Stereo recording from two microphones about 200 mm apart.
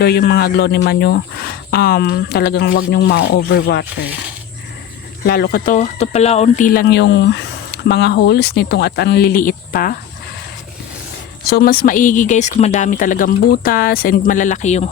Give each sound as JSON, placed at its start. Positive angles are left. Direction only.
{"t": 0.0, "sound": "speech", "side_deg": 50}
{"t": 5.2, "sound": "speech", "side_deg": 50}
{"t": 11.4, "sound": "speech", "side_deg": 50}